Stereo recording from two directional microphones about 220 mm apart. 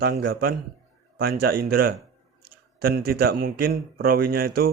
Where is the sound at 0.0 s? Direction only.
45° right (ahead or behind).